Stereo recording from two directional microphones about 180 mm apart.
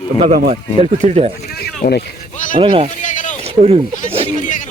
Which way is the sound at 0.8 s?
35° right (ahead or behind).